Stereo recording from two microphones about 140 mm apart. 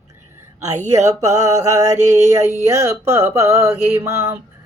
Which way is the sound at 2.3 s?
20° right (ahead or behind).